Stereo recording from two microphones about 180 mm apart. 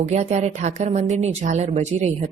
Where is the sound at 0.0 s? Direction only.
40° right (ahead or behind).